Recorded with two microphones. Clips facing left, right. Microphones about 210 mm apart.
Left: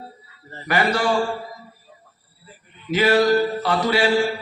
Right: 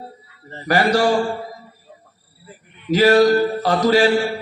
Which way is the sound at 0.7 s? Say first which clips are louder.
Right 4 dB; 40° right (ahead or behind).